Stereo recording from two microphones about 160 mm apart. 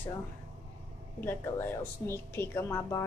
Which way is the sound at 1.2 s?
15° left (ahead or behind).